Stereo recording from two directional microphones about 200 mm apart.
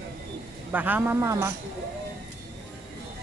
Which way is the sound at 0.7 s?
10° right (ahead or behind).